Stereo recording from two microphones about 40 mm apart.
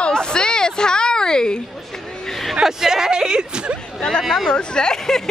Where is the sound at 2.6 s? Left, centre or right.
Centre.